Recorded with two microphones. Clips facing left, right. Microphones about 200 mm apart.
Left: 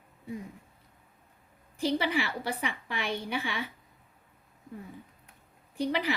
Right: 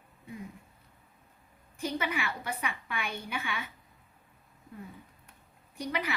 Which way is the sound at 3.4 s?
35° left (ahead or behind).